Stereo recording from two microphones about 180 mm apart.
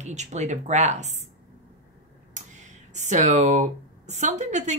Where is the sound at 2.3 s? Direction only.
40° right (ahead or behind).